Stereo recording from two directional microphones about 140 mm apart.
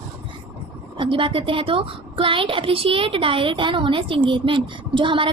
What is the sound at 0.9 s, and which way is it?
A woman's voice, 40° right (ahead or behind).